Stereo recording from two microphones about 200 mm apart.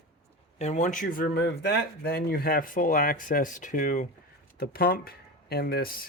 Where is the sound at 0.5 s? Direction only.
35° left (ahead or behind).